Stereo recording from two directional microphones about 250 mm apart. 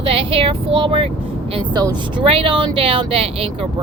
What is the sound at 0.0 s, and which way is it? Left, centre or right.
Speech, right.